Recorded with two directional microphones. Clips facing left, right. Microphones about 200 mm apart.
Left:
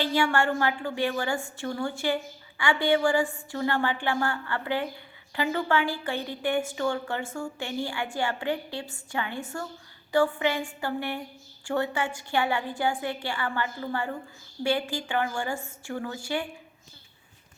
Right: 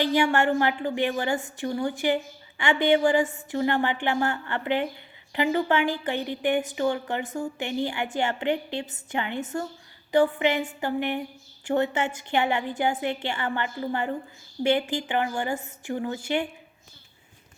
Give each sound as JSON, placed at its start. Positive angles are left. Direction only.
{"t": 0.0, "sound": "a woman's voice", "side_deg": -15}